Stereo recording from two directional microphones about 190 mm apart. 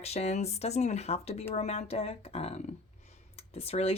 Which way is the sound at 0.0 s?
35° left (ahead or behind).